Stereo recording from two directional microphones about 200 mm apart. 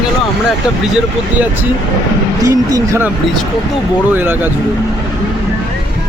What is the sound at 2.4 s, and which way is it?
Speech, 15° right (ahead or behind).